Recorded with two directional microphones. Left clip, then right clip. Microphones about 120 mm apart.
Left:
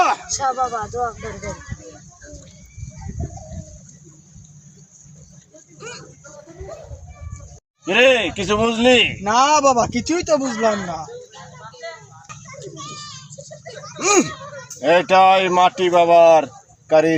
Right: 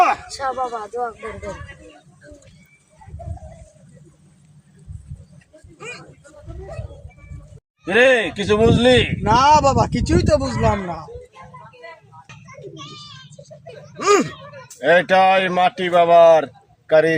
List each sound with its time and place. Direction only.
0.3 s speech: centre (ahead or behind)
0.5 s speech: 15° right (ahead or behind)
7.9 s speech: 15° right (ahead or behind)
9.2 s speech: 35° right (ahead or behind)
13.3 s a sound: 20° left (ahead or behind)
13.9 s speech: 15° right (ahead or behind)
14.3 s speech: 15° left (ahead or behind)
14.8 s speech: 15° right (ahead or behind)